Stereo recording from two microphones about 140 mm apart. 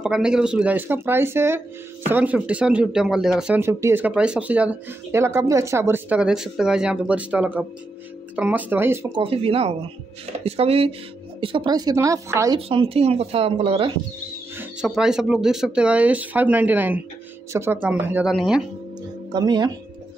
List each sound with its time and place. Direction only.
0.0 s speech: 5° right (ahead or behind)
3.5 s speech: 15° right (ahead or behind)
9.1 s a woman's voice: 40° right (ahead or behind); by 12.5 s 20° right (ahead or behind)
12.5 s speech: 45° right (ahead or behind)
14.6 s speech: 5° right (ahead or behind)
18.3 s speech: centre (ahead or behind)
19.3 s a woman's voice: 30° right (ahead or behind)